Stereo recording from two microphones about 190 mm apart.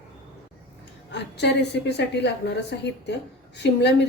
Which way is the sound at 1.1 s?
65° left (ahead or behind).